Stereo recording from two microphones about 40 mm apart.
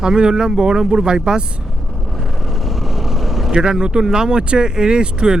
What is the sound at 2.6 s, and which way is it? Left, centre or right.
Vehicle, centre.